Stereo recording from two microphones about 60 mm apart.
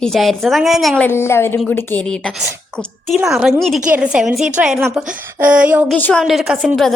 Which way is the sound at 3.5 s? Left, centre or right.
Centre.